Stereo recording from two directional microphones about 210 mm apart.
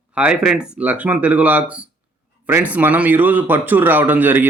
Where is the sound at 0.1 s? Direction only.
5° right (ahead or behind).